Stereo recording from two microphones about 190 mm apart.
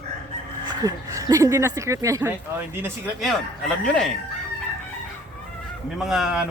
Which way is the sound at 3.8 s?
5° left (ahead or behind).